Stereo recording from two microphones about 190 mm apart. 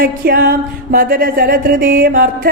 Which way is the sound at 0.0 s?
50° right (ahead or behind).